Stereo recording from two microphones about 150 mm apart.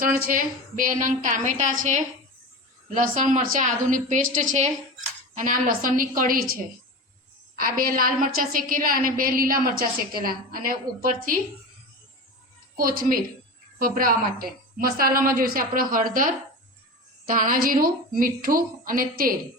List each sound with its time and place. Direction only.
0.3 s a woman's voice: 70° right (ahead or behind)
12.7 s a woman's voice: 70° right (ahead or behind)